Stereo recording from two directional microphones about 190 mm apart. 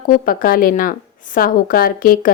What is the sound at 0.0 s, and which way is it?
A woman's voice, 45° left (ahead or behind).